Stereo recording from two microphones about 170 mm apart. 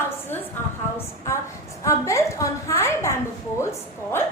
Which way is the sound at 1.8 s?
20° left (ahead or behind).